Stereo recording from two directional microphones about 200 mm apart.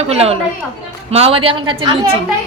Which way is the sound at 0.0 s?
30° right (ahead or behind).